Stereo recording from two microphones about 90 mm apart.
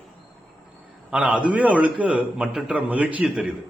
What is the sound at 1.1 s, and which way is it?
A man's voice, 15° right (ahead or behind).